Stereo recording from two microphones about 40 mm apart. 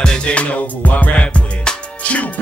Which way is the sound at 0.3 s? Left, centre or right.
Left.